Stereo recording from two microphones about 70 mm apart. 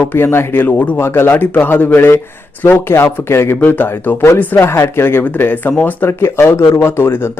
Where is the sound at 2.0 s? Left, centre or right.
Left.